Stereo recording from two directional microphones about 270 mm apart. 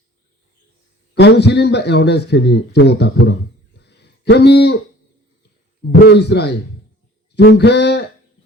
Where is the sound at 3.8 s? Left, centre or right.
Left.